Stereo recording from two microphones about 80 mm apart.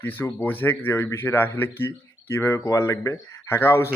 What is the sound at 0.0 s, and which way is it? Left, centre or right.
A man's voice, left.